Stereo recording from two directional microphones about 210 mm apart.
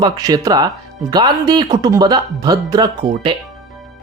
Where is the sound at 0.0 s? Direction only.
20° right (ahead or behind).